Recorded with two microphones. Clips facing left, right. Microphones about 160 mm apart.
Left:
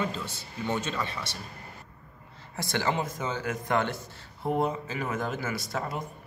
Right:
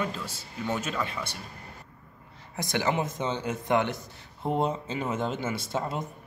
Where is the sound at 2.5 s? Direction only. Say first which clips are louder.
Right 1 dB; 15° right (ahead or behind).